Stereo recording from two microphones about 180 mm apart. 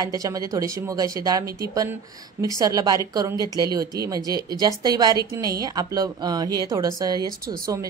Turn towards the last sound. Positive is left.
turn(degrees=-20)  # may be behind; listen again after turning